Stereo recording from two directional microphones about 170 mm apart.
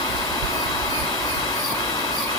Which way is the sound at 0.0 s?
20° left (ahead or behind).